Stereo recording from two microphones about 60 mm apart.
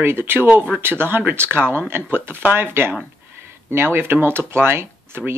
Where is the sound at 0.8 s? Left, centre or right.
Right.